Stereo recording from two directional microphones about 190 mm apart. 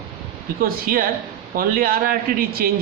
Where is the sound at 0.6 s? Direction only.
50° right (ahead or behind).